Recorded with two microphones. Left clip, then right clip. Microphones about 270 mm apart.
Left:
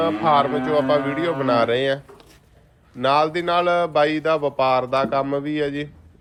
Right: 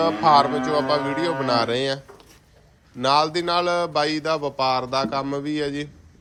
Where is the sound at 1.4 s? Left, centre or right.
Centre.